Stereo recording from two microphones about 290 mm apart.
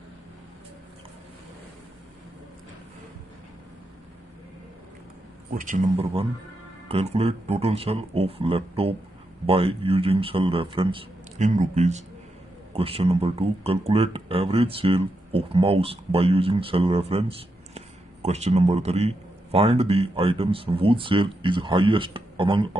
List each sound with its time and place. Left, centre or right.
5.5 s speech: right